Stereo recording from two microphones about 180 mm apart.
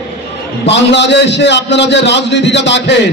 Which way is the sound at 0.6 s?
75° left (ahead or behind).